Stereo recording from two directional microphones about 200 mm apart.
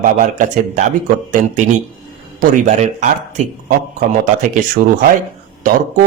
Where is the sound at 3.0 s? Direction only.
35° right (ahead or behind).